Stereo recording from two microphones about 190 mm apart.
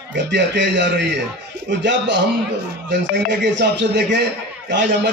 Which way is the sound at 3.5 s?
65° right (ahead or behind).